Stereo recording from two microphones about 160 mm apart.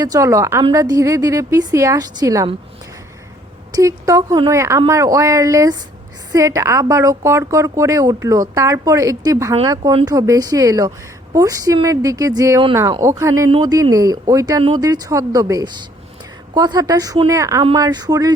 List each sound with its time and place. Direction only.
0.0 s a woman's voice: 20° right (ahead or behind)
3.7 s a woman's voice: 20° right (ahead or behind)